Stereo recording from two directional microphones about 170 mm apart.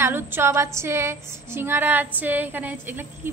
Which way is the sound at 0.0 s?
15° right (ahead or behind).